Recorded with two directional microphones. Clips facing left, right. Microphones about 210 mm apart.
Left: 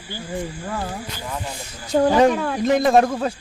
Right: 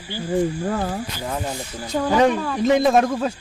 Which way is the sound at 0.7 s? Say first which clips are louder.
Right 4 dB; 40° right (ahead or behind).